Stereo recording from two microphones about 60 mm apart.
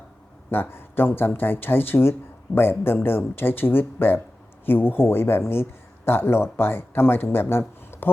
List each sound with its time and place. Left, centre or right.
0.5 s speech: left